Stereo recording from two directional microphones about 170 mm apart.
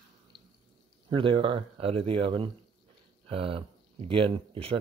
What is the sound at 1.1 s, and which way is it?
Speech, 30° right (ahead or behind).